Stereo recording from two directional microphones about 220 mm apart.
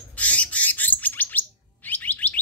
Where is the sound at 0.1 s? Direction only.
5° left (ahead or behind).